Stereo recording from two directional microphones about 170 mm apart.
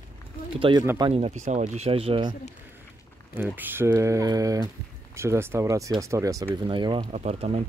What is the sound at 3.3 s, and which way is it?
Speech, 10° right (ahead or behind).